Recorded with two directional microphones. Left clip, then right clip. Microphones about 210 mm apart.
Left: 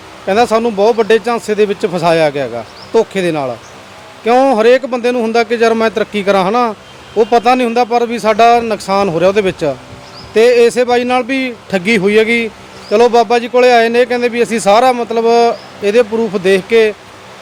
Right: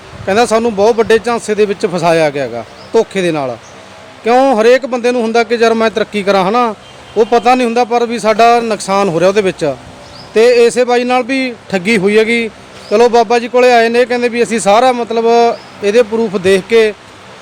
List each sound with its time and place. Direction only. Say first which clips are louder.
0.3 s speech: even; centre (ahead or behind)